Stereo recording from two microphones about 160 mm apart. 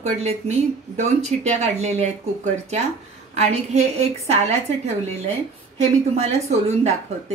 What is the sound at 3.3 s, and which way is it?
A woman's voice, 45° right (ahead or behind).